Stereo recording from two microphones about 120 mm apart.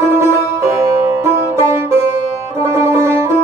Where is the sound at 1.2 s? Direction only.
20° right (ahead or behind).